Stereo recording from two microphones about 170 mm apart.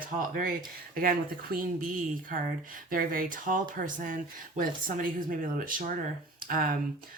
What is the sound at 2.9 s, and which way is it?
Speech, 55° right (ahead or behind).